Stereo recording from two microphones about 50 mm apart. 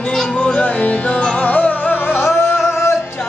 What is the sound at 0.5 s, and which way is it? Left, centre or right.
Music, left.